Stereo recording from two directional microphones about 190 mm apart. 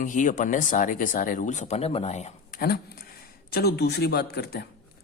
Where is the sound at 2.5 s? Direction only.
55° left (ahead or behind).